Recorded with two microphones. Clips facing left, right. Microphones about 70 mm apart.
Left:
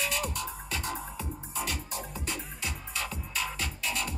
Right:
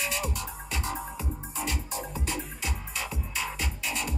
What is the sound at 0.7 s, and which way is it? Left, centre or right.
Music, centre.